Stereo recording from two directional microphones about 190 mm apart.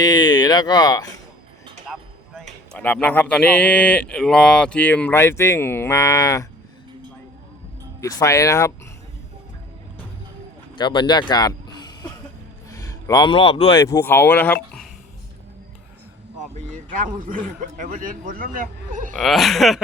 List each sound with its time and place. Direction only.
0.0 s speech: 20° left (ahead or behind)
2.7 s speech: 10° left (ahead or behind)
8.0 s speech: 15° left (ahead or behind)
10.8 s speech: 25° left (ahead or behind)
12.7 s speech: 15° left (ahead or behind)
13.8 s speech: 15° left (ahead or behind)
16.7 s a man's voice: 45° right (ahead or behind)
19.1 s speech: centre (ahead or behind)